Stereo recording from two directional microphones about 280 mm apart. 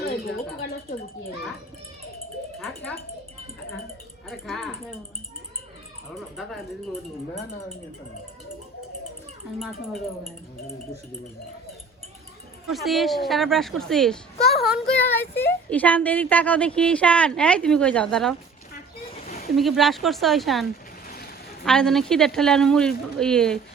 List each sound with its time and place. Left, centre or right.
2.6 s a child's voice: centre
4.3 s a child's voice: centre
6.1 s a child's voice: centre
9.6 s a child's voice: centre
12.6 s a child's voice: centre
18.7 s a sound: left
19.5 s a child's voice: centre